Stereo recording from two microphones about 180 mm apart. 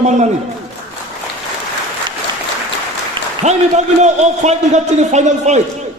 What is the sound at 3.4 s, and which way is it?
A man's voice, 40° right (ahead or behind).